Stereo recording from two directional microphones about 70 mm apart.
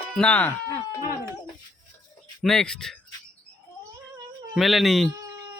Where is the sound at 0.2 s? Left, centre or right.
Left.